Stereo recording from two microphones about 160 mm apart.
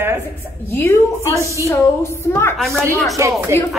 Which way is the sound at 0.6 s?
15° left (ahead or behind).